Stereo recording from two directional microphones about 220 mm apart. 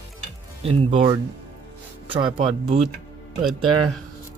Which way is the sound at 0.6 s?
25° right (ahead or behind).